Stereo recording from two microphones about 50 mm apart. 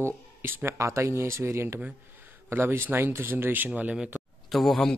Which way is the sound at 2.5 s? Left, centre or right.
Right.